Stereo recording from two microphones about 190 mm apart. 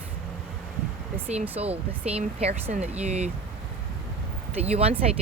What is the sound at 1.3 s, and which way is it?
Speech, 35° right (ahead or behind).